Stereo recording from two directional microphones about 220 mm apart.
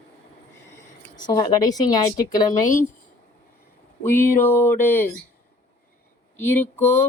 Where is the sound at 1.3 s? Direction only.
15° left (ahead or behind).